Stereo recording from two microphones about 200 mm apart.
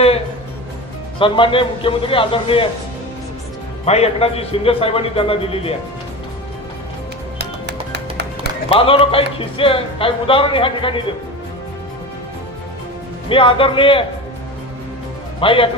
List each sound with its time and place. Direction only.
1.2 s speech: 25° left (ahead or behind)
3.8 s speech: 30° left (ahead or behind)
7.3 s music: 55° right (ahead or behind)
8.7 s speech: 25° left (ahead or behind)
13.2 s speech: 25° left (ahead or behind)
15.4 s speech: 25° left (ahead or behind)